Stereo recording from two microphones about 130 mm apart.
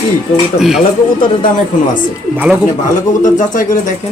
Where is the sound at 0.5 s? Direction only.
5° right (ahead or behind).